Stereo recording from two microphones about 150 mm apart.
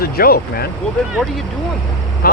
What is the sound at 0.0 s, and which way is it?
Speech, 85° left.